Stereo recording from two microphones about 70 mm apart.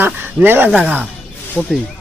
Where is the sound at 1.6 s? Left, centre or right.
Centre.